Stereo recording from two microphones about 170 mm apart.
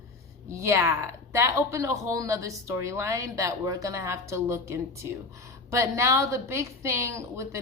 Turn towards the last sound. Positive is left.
turn(degrees=-15)  # may be behind; listen again after turning